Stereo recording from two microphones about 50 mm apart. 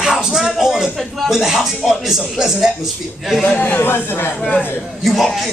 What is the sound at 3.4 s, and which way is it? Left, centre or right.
Speech, left.